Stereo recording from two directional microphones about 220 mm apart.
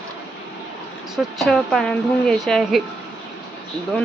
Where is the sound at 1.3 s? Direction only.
Centre (ahead or behind).